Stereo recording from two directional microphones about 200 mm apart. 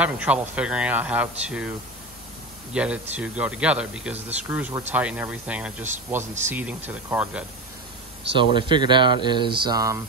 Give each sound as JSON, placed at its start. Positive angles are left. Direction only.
{"t": 0.0, "sound": "speech", "side_deg": -5}
{"t": 2.7, "sound": "speech", "side_deg": -5}
{"t": 8.5, "sound": "speech", "side_deg": -25}